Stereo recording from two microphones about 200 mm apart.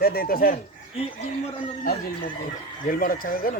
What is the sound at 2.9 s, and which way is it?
Speech, 45° left (ahead or behind).